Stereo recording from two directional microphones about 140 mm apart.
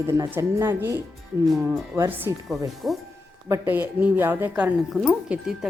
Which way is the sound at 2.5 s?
Centre (ahead or behind).